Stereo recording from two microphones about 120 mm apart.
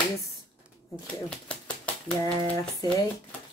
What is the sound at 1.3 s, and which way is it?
Typewriter, 10° left (ahead or behind).